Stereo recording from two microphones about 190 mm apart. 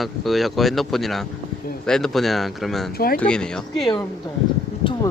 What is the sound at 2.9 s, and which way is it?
Speech, 50° left (ahead or behind).